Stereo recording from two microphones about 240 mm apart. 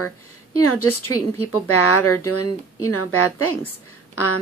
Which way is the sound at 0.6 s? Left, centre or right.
Left.